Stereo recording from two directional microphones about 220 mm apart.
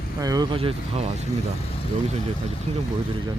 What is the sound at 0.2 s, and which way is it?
Speech, 15° right (ahead or behind).